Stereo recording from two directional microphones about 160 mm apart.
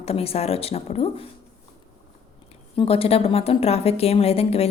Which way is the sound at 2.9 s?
40° left (ahead or behind).